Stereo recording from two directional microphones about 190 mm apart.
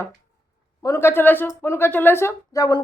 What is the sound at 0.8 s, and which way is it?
Speech, 15° left (ahead or behind).